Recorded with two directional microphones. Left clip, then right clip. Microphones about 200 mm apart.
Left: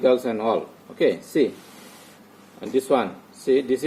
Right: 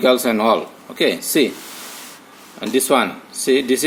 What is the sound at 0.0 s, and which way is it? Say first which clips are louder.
Speech: right 5 dB; 25° right (ahead or behind).